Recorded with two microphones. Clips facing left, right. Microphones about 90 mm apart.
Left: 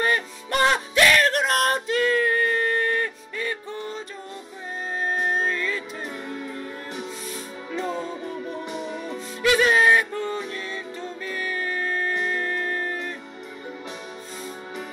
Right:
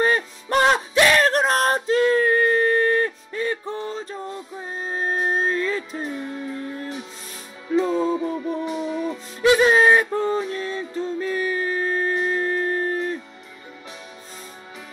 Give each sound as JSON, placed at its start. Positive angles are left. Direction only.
{"t": 0.0, "sound": "music", "side_deg": -30}
{"t": 0.7, "sound": "male singing", "side_deg": -20}
{"t": 4.8, "sound": "music", "side_deg": -30}
{"t": 7.7, "sound": "music", "side_deg": -5}
{"t": 9.4, "sound": "music", "side_deg": -25}